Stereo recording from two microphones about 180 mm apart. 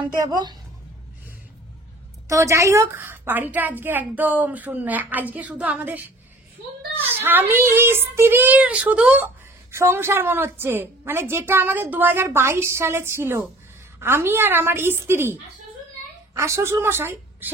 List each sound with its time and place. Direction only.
0.0 s speech: 25° right (ahead or behind)
2.2 s speech: 15° right (ahead or behind)
16.3 s a woman's voice: 15° right (ahead or behind)